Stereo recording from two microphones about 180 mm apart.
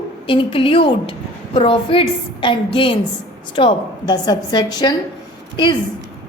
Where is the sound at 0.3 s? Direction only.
30° left (ahead or behind).